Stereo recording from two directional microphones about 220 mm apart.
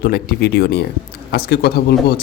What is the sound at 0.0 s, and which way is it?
Speech, 45° left (ahead or behind).